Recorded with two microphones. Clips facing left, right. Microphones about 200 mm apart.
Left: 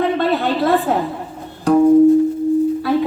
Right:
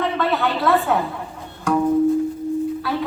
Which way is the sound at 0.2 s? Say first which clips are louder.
Left 4 dB; 35° left (ahead or behind).